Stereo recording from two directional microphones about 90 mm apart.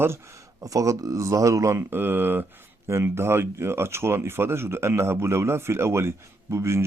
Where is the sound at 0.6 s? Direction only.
40° right (ahead or behind).